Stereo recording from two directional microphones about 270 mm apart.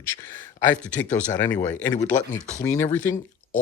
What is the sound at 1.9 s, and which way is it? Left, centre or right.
Speech, left.